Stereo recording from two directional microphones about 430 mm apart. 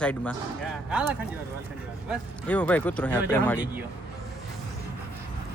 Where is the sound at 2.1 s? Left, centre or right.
Centre.